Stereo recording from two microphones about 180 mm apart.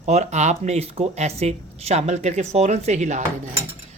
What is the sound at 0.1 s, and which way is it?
Speech, 40° right (ahead or behind).